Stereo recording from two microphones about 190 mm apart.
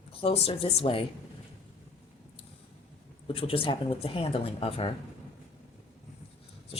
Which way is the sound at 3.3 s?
30° left (ahead or behind).